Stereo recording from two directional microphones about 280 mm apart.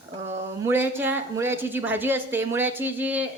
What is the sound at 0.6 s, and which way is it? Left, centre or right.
Speech, centre.